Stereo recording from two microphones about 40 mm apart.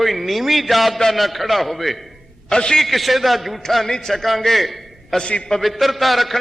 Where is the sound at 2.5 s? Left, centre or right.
Centre.